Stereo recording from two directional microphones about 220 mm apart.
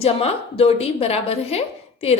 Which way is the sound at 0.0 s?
25° left (ahead or behind).